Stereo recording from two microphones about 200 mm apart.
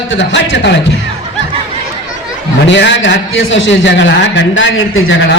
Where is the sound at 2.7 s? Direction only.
65° left (ahead or behind).